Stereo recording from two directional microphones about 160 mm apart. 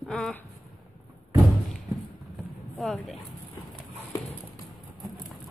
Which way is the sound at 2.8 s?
Centre (ahead or behind).